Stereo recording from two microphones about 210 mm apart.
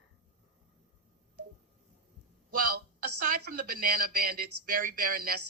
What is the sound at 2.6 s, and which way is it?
Speech, 45° right (ahead or behind).